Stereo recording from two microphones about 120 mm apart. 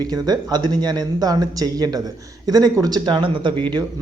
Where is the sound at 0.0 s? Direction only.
35° right (ahead or behind).